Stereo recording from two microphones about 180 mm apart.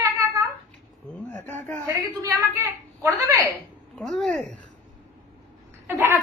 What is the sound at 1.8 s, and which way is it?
A woman's voice, 15° right (ahead or behind).